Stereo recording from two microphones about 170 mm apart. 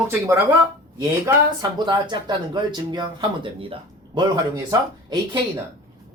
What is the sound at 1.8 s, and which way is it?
Speech, 25° right (ahead or behind).